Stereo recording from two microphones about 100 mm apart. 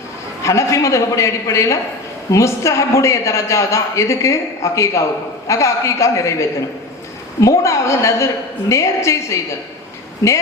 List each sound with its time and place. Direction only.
0.4 s a woman's voice: 30° left (ahead or behind)
7.4 s a woman's voice: 30° left (ahead or behind)